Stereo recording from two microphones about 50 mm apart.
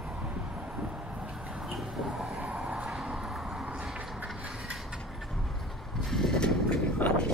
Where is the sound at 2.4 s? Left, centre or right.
Centre.